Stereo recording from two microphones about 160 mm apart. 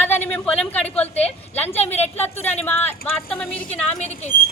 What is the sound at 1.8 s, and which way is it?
Speech, 40° left (ahead or behind).